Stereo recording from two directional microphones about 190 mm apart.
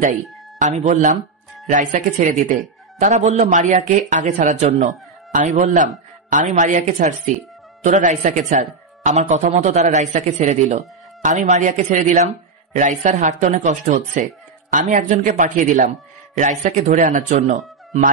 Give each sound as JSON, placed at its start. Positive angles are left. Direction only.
{"t": 0.0, "sound": "speech", "side_deg": -40}